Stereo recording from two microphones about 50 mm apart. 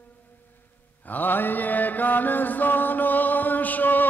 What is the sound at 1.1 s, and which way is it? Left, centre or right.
Mantra, left.